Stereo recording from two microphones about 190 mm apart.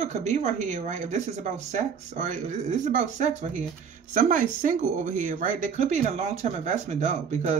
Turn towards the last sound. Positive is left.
turn(degrees=-40)  # may be behind; listen again after turning